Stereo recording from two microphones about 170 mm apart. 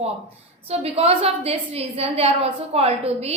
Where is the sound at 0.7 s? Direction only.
35° right (ahead or behind).